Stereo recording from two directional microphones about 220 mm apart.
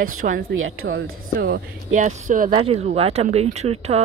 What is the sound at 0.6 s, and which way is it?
Speech, 65° right (ahead or behind).